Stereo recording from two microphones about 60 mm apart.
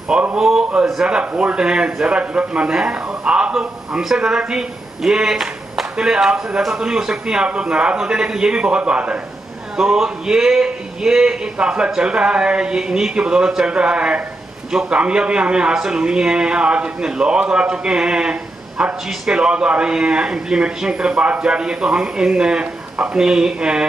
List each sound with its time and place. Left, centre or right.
0.1 s a man's voice: centre
0.4 s a man's voice: centre
9.8 s a man's voice: centre